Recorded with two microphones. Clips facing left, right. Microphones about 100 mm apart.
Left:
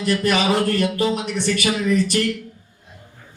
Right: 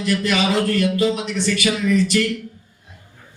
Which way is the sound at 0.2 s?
45° left (ahead or behind).